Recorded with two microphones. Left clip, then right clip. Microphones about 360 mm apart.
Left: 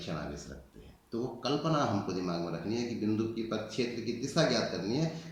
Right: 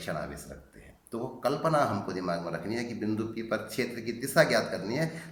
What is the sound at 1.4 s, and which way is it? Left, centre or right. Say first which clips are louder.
Speech: right 5 dB; centre.